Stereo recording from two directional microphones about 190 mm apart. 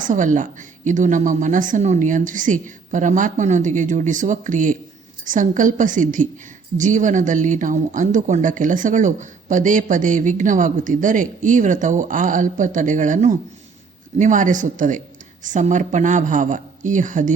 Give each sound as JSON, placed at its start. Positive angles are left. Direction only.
{"t": 0.1, "sound": "a woman's voice", "side_deg": -40}